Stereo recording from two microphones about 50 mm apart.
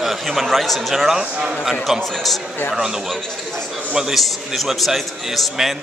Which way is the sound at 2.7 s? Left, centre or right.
Centre.